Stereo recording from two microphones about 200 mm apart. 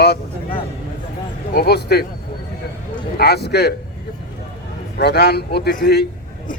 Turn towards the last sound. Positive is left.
turn(degrees=55)  # may be behind; listen again after turning